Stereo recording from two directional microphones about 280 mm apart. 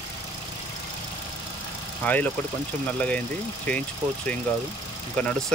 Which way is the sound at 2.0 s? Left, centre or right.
Centre.